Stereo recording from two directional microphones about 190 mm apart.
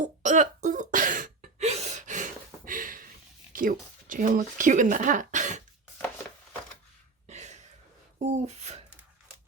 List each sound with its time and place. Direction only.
0.0 s cough: 40° right (ahead or behind)
3.5 s speech: 45° right (ahead or behind)
7.3 s a sound: 35° right (ahead or behind)